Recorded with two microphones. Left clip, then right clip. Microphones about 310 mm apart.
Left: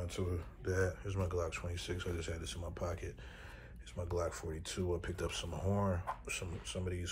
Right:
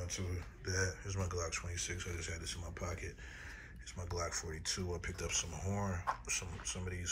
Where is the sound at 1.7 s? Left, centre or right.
Left.